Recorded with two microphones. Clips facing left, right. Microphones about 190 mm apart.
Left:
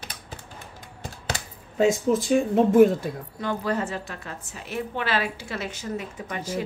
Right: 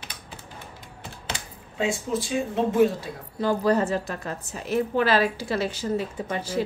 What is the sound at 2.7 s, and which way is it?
Speech, 50° left (ahead or behind).